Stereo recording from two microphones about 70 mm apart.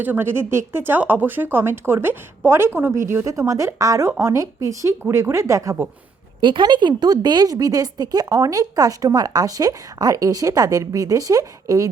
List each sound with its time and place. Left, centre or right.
0.0 s speech: right
3.2 s speech: right
6.7 s speech: right